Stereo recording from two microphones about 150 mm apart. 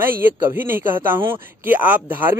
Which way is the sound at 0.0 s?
15° right (ahead or behind).